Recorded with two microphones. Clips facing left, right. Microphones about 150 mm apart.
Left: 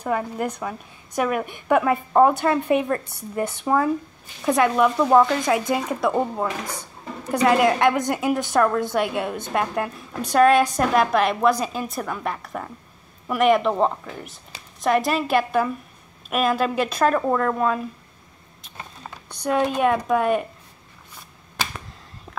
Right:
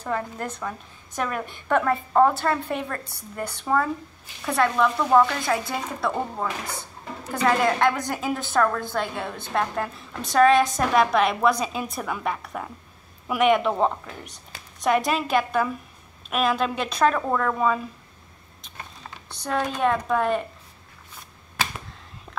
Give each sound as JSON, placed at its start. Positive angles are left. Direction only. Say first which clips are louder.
{"t": 0.0, "sound": "a woman's voice", "louder": "left 4 dB", "side_deg": 10}
{"t": 7.4, "sound": "a woman's voice", "louder": "left 3 dB", "side_deg": 10}
{"t": 19.2, "sound": "a woman's voice", "louder": "left 5 dB", "side_deg": 15}